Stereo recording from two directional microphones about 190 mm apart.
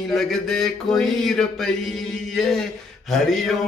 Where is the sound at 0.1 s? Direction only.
Centre (ahead or behind).